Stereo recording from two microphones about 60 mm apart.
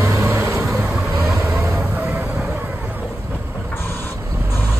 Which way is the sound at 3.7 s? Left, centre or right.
Left.